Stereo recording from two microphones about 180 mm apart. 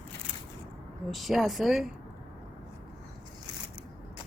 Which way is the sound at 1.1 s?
Centre (ahead or behind).